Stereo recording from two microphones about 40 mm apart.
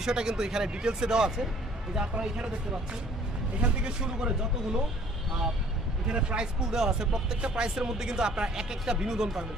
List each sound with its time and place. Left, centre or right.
0.0 s speech: centre
3.6 s speech: right
6.1 s speech: right